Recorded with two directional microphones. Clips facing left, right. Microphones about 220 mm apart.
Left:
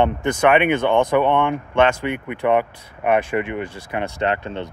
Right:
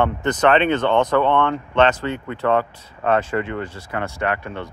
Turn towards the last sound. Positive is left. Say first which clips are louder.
# left 2 dB
turn(degrees=25)  # may be behind; listen again after turning